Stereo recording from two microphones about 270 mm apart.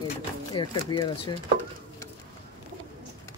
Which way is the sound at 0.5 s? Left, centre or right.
Centre.